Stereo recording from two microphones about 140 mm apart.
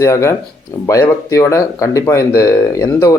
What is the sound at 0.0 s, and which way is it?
Speech, 20° left (ahead or behind).